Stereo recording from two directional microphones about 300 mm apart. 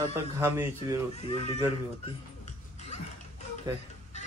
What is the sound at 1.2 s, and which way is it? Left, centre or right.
Speech, centre.